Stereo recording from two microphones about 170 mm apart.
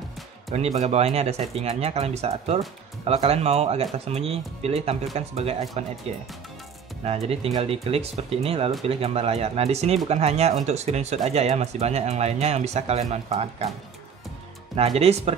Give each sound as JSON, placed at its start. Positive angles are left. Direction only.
{"t": 0.5, "sound": "speech", "side_deg": -40}
{"t": 14.8, "sound": "speech", "side_deg": -35}